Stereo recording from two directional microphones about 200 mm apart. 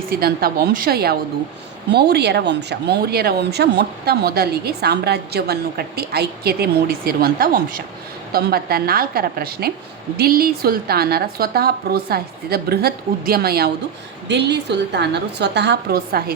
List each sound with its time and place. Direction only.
0.1 s a woman's voice: 50° right (ahead or behind)